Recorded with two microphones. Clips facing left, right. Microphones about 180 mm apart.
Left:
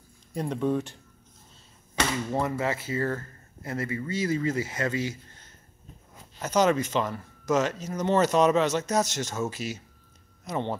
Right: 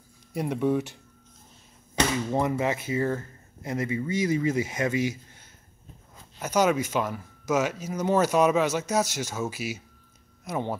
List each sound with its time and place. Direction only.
0.3 s speech: 10° right (ahead or behind)
2.0 s speech: 15° right (ahead or behind)